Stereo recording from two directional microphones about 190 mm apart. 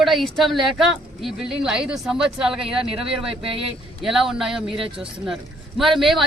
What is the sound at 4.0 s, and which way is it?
Speech, centre (ahead or behind).